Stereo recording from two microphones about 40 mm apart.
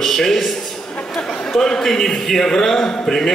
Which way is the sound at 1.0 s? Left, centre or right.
Centre.